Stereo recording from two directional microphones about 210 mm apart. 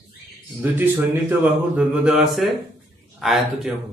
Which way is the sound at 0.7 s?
10° right (ahead or behind).